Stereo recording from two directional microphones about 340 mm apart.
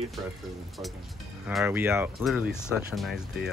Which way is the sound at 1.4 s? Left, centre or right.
Centre.